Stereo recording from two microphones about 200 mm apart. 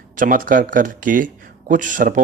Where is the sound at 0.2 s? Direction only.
45° right (ahead or behind).